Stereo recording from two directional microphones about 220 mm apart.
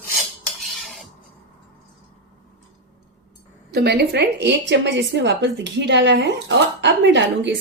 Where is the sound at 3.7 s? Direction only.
50° right (ahead or behind).